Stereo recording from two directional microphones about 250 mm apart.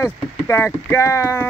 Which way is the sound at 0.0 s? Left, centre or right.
Centre.